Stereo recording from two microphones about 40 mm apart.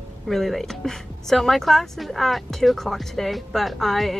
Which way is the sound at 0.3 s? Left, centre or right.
Centre.